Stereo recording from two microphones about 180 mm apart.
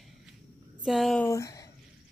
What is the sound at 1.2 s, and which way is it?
Speech, 20° left (ahead or behind).